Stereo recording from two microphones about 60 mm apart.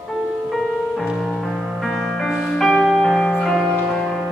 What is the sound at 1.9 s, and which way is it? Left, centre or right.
Music, centre.